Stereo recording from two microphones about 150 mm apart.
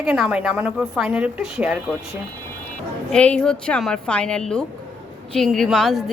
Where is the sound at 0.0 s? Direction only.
5° right (ahead or behind).